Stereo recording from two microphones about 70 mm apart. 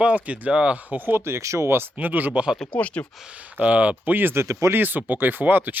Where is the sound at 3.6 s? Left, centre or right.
Centre.